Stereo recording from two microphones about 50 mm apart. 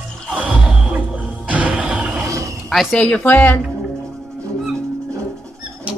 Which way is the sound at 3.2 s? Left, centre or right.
Left.